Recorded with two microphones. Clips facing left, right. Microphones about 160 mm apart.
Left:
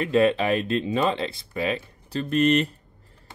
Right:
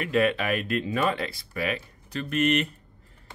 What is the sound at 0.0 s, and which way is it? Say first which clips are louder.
Speech: left 4 dB; 30° left (ahead or behind).